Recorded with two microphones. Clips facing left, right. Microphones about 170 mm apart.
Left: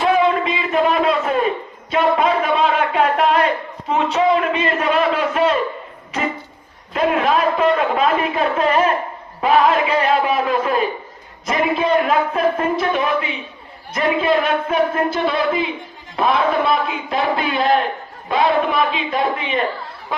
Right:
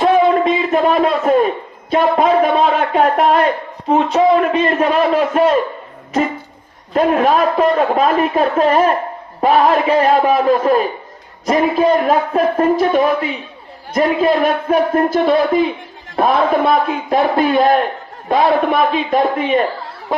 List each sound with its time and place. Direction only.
0.0 s a sound: 40° right (ahead or behind)
1.9 s a man's voice: 40° right (ahead or behind)
6.9 s a man's voice: 40° right (ahead or behind)